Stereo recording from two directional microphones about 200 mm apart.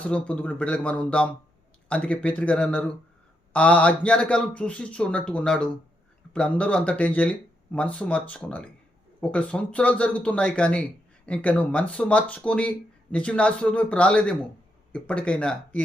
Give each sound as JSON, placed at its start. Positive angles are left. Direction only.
{"t": 0.0, "sound": "speech", "side_deg": 5}